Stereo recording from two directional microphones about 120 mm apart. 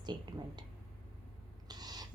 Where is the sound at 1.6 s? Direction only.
35° right (ahead or behind).